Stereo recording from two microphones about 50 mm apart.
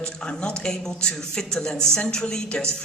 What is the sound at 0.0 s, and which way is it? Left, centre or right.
A man's voice, centre.